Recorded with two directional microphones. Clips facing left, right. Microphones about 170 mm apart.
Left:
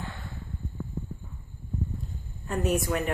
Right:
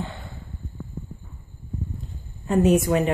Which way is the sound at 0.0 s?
20° right (ahead or behind).